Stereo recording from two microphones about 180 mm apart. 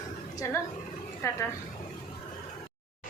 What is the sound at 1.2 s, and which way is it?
Speech, 15° left (ahead or behind).